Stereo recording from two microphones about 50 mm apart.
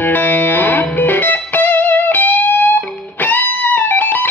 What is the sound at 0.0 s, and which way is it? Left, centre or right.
Music, left.